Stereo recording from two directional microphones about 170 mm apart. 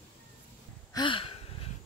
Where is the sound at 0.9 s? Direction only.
30° left (ahead or behind).